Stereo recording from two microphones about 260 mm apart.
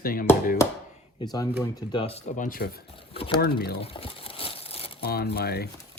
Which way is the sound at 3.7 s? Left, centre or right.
Left.